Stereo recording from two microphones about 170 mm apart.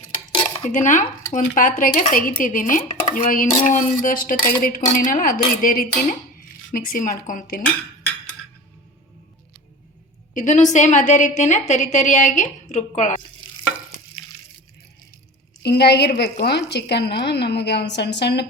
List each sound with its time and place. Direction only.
0.7 s speech: 50° left (ahead or behind)
10.3 s speech: 45° left (ahead or behind)
15.6 s speech: 75° left (ahead or behind)